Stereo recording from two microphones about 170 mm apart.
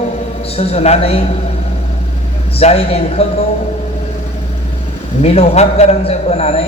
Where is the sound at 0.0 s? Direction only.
40° left (ahead or behind).